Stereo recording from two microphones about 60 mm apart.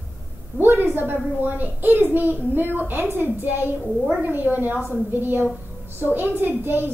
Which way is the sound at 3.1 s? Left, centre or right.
Right.